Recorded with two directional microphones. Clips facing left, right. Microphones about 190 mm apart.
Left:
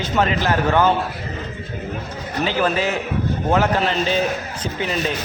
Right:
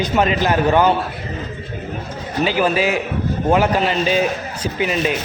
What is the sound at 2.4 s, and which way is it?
Speech, 10° right (ahead or behind).